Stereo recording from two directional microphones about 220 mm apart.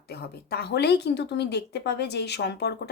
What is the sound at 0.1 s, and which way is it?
Speech, 45° left (ahead or behind).